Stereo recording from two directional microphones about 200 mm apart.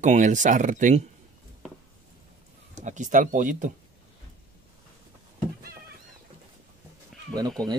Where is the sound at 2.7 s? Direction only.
40° right (ahead or behind).